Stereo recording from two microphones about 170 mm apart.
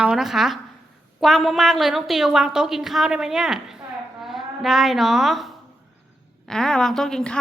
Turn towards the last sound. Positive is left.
turn(degrees=5)  # may be behind; listen again after turning